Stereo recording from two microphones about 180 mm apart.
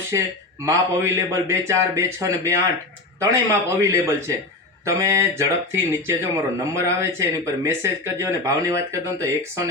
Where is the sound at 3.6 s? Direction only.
15° right (ahead or behind).